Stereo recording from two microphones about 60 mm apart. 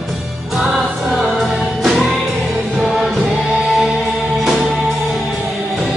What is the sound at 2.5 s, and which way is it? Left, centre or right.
Music, right.